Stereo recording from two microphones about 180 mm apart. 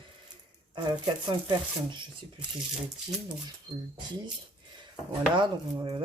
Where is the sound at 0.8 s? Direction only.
25° right (ahead or behind).